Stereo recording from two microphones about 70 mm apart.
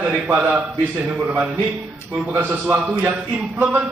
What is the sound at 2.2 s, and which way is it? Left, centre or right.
Speech, right.